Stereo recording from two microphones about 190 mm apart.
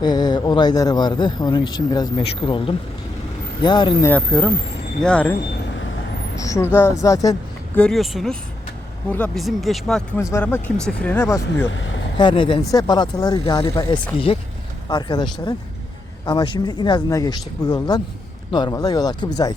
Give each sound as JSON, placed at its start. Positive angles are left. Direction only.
{"t": 0.0, "sound": "speech", "side_deg": 20}
{"t": 5.0, "sound": "speech", "side_deg": 5}
{"t": 6.4, "sound": "speech", "side_deg": 15}
{"t": 7.8, "sound": "speech", "side_deg": 0}
{"t": 12.1, "sound": "speech", "side_deg": 25}